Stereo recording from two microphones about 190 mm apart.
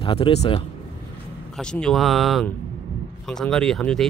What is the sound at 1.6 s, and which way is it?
Speech, 5° left (ahead or behind).